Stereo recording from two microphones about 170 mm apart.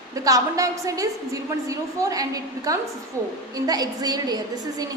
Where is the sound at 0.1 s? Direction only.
20° right (ahead or behind).